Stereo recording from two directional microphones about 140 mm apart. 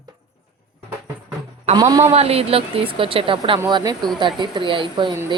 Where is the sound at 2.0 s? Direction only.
45° right (ahead or behind).